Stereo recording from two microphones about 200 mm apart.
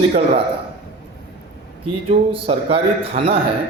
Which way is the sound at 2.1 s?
25° right (ahead or behind).